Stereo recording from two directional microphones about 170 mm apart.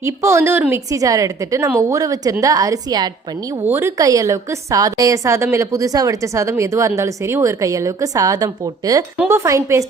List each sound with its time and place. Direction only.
0.0 s a woman's voice: 15° right (ahead or behind)